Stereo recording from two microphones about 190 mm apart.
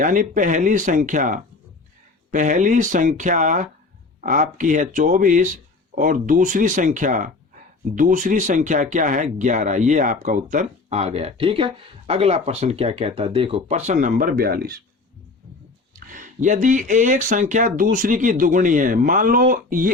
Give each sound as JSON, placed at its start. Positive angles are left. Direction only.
{"t": 0.0, "sound": "speech", "side_deg": -45}
{"t": 16.0, "sound": "speech", "side_deg": -40}